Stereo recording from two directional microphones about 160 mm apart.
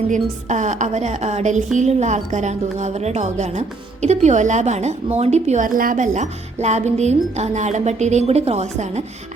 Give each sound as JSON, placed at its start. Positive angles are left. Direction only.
{"t": 0.1, "sound": "a woman's voice", "side_deg": -50}